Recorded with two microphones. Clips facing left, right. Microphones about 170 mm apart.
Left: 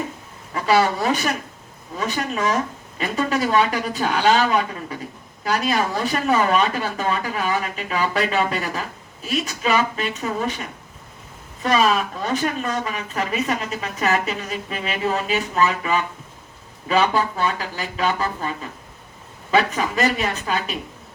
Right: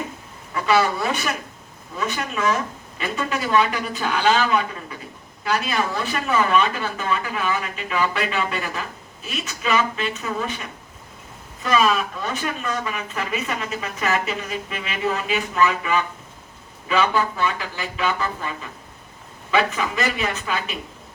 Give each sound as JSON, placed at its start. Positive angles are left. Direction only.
{"t": 0.7, "sound": "speech", "side_deg": 35}
{"t": 11.6, "sound": "speech", "side_deg": 35}